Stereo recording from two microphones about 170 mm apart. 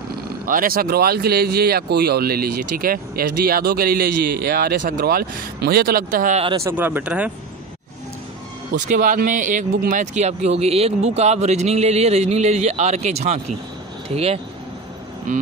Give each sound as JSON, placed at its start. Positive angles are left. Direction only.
{"t": 0.5, "sound": "speech", "side_deg": -55}
{"t": 6.3, "sound": "speech", "side_deg": -35}
{"t": 6.6, "sound": "speech", "side_deg": -10}
{"t": 8.7, "sound": "speech", "side_deg": -50}